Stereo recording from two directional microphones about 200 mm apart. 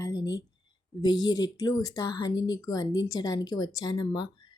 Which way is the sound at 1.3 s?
20° left (ahead or behind).